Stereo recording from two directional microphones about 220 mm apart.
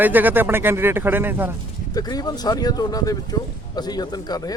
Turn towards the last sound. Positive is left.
turn(degrees=20)  # may be behind; listen again after turning